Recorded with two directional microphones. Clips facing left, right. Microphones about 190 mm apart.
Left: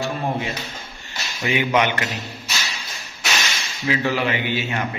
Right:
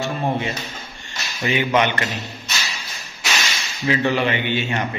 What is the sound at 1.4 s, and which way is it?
A man's voice, 10° left (ahead or behind).